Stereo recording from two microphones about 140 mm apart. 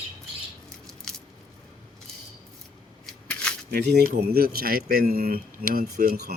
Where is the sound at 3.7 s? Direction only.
90° right.